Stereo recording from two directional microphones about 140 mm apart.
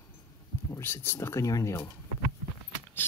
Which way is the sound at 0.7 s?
15° left (ahead or behind).